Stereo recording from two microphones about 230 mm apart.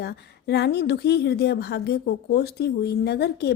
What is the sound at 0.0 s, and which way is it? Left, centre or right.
A woman's voice, left.